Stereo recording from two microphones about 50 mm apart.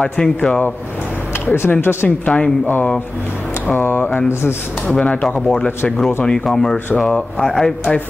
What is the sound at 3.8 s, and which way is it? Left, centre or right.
Speech, left.